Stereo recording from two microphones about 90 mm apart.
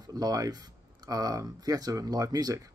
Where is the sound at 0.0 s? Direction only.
45° right (ahead or behind).